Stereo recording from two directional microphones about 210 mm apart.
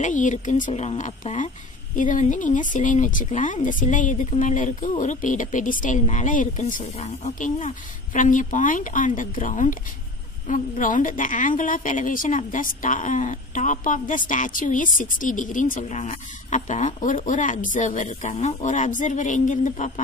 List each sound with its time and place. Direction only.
0.0 s speech: 35° left (ahead or behind)